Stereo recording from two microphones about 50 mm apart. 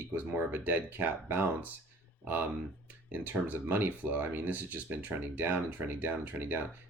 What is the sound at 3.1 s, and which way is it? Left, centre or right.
Speech, right.